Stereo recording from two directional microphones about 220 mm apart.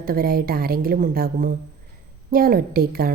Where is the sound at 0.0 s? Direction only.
40° right (ahead or behind).